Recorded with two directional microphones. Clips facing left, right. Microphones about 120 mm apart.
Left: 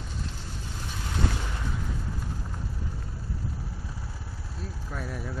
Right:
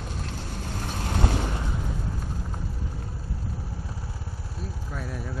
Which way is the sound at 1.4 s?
25° right (ahead or behind).